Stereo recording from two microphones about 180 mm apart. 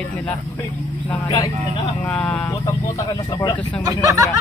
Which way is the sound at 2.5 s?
20° left (ahead or behind).